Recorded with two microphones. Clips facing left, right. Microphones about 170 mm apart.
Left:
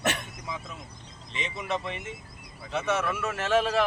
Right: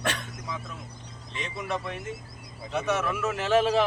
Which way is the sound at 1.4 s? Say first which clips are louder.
Even; centre (ahead or behind).